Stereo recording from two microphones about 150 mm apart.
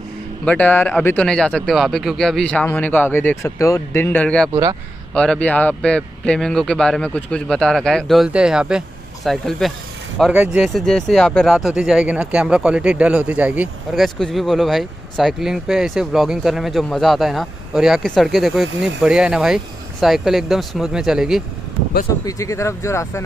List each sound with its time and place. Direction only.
0.5 s speech: 10° left (ahead or behind)
10.3 s speech: 15° right (ahead or behind)
10.6 s speech: 5° left (ahead or behind)
22.2 s speech: 20° left (ahead or behind)